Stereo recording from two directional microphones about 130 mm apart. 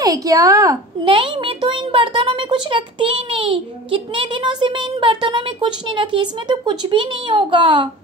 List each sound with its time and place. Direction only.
0.0 s a woman's voice: 25° right (ahead or behind)
1.0 s a child's voice: 40° right (ahead or behind)